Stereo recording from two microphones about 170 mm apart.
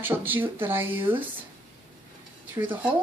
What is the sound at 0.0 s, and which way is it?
Speech, 10° right (ahead or behind).